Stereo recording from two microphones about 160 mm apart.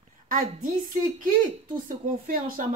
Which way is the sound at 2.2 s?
60° right (ahead or behind).